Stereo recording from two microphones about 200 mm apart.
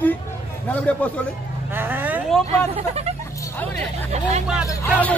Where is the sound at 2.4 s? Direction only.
30° right (ahead or behind).